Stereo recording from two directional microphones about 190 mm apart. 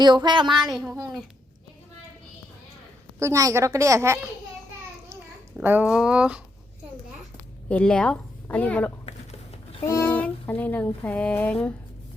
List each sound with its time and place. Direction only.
0.0 s child singing: 25° right (ahead or behind)
0.5 s speech: centre (ahead or behind)
3.2 s a woman's voice: 15° right (ahead or behind)
5.5 s speech: 10° right (ahead or behind)
7.7 s a woman's voice: 5° left (ahead or behind)
9.8 s a sound: 15° left (ahead or behind)